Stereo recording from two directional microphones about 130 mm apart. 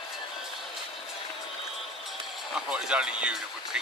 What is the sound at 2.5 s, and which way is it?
Speech, 5° right (ahead or behind).